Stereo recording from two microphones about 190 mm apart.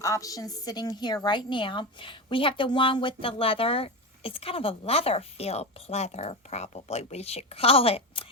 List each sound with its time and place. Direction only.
0.0 s a woman's voice: 15° left (ahead or behind)